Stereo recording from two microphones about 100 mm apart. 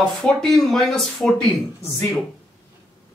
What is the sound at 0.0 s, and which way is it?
Speech, 5° left (ahead or behind).